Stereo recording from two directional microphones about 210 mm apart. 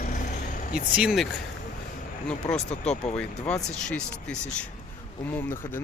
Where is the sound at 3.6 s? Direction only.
35° left (ahead or behind).